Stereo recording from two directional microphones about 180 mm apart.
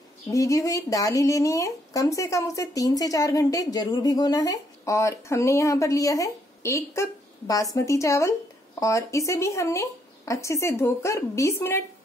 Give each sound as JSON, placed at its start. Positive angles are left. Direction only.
{"t": 0.3, "sound": "speech", "side_deg": 15}